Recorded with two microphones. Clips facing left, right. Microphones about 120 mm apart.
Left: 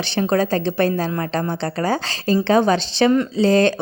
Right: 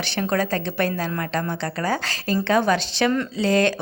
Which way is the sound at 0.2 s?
30° left (ahead or behind).